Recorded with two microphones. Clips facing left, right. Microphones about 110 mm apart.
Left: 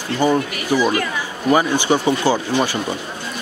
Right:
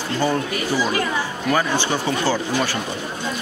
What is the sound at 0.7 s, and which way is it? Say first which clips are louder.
Speech: left 4 dB; 15° left (ahead or behind).